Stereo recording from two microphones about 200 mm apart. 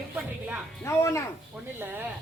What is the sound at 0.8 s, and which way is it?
Speech, 15° left (ahead or behind).